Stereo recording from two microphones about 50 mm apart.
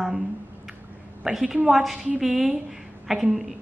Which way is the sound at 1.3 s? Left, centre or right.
Right.